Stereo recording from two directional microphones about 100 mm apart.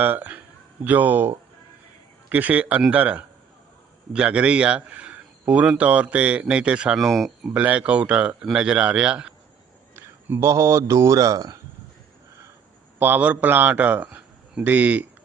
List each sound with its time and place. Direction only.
0.0 s a man's voice: 20° right (ahead or behind)
2.3 s a man's voice: 15° right (ahead or behind); by 7.5 s centre (ahead or behind)
7.5 s a man's voice: 15° right (ahead or behind)
9.9 s speech: 25° right (ahead or behind)
13.0 s speech: 20° right (ahead or behind)